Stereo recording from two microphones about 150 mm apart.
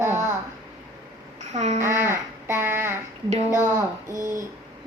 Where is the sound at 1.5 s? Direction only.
50° right (ahead or behind).